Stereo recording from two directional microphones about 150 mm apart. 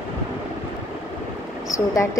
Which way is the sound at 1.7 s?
20° left (ahead or behind).